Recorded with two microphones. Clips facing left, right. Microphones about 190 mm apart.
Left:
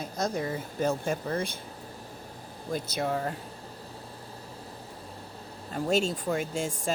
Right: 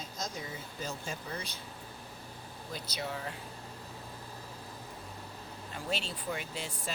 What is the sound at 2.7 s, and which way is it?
Speech, 50° left (ahead or behind).